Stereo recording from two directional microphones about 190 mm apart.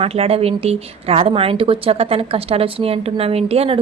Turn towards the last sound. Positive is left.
turn(degrees=-30)  # may be behind; listen again after turning